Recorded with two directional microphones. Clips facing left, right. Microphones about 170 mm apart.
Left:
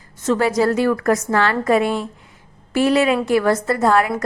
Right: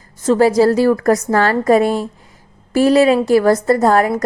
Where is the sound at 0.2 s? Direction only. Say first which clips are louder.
Right 6 dB; 35° right (ahead or behind).